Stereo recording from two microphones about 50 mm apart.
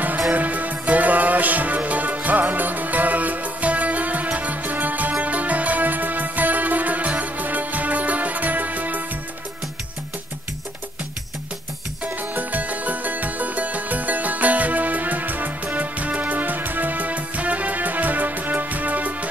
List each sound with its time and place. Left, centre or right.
0.3 s music: right
12.0 s music: right